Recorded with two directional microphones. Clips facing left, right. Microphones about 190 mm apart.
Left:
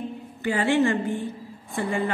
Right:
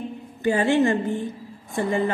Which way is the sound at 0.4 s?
20° right (ahead or behind).